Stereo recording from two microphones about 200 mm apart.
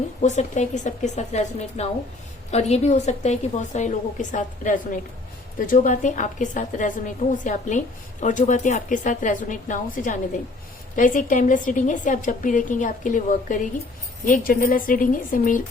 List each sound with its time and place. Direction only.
0.2 s a woman's voice: 35° left (ahead or behind)